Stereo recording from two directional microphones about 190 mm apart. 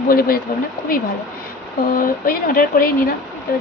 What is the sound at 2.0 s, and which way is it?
Speech, 50° left (ahead or behind).